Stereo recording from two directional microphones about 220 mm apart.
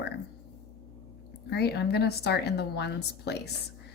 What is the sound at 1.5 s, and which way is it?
Speech, 45° left (ahead or behind).